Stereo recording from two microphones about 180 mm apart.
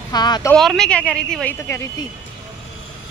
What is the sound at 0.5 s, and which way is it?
A woman's voice, centre (ahead or behind).